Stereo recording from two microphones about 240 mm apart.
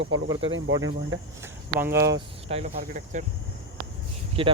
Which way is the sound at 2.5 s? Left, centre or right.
Right.